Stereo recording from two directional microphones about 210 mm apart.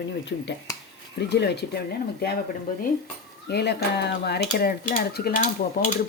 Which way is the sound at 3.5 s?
50° left (ahead or behind).